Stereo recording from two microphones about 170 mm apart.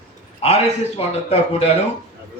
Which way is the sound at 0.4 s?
35° left (ahead or behind).